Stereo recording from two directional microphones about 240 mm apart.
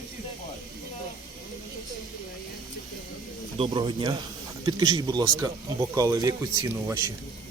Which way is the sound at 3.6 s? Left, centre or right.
Centre.